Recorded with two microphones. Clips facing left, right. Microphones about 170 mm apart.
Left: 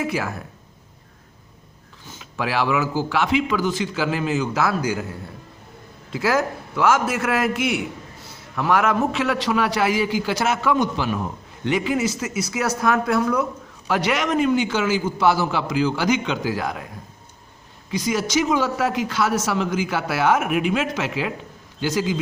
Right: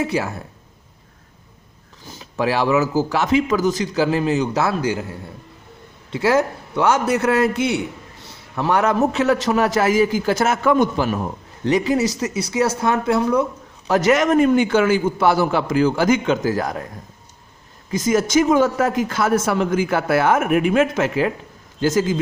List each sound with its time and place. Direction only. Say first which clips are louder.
0.0 s a man's voice: right 3 dB; 30° right (ahead or behind)
2.0 s a man's voice: right 5 dB; 35° right (ahead or behind)
6.1 s a man's voice: right 4 dB; 25° right (ahead or behind)
13.8 s speech: right 6 dB; 40° right (ahead or behind)
17.9 s a man's voice: right 5 dB; 45° right (ahead or behind)